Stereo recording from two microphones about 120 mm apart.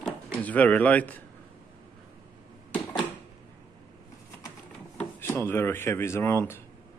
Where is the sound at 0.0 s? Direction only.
10° left (ahead or behind).